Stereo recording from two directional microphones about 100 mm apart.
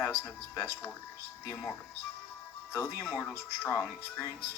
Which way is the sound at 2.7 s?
25° left (ahead or behind).